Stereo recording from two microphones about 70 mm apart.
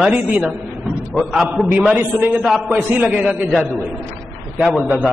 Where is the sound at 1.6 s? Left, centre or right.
Right.